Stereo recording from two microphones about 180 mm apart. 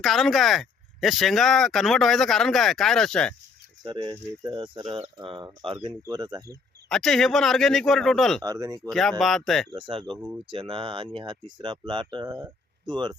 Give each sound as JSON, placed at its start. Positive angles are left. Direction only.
{"t": 0.0, "sound": "speech", "side_deg": 0}
{"t": 3.8, "sound": "speech", "side_deg": -30}
{"t": 6.0, "sound": "speech", "side_deg": -20}
{"t": 6.8, "sound": "speech", "side_deg": 5}
{"t": 8.4, "sound": "speech", "side_deg": -20}
{"t": 8.9, "sound": "speech", "side_deg": 0}
{"t": 9.7, "sound": "speech", "side_deg": -30}
{"t": 10.2, "sound": "speech", "side_deg": -10}
{"t": 10.5, "sound": "speech", "side_deg": -30}